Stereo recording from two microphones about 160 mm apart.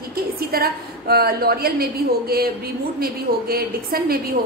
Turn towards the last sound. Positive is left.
turn(degrees=-70)  # may be behind; listen again after turning